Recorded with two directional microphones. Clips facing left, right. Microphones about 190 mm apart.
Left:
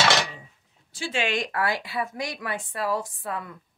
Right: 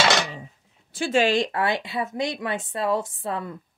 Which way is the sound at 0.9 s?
50° right (ahead or behind).